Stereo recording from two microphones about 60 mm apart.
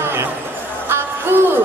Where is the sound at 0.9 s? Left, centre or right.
Right.